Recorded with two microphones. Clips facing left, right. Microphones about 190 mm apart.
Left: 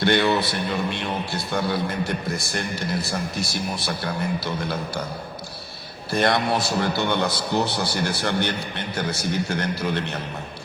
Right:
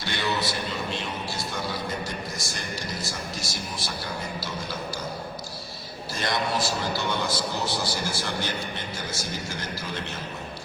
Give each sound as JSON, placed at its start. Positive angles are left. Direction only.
{"t": 0.0, "sound": "a man's voice", "side_deg": 60}
{"t": 6.1, "sound": "a man's voice", "side_deg": 60}